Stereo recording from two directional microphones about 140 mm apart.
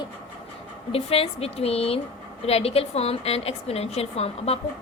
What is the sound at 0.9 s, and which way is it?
A woman's voice, 45° left (ahead or behind).